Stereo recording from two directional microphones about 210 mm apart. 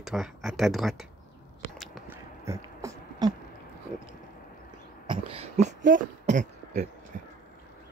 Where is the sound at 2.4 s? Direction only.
15° right (ahead or behind).